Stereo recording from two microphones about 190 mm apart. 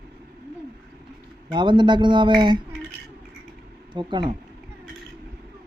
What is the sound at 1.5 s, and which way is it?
A man's voice, 25° right (ahead or behind).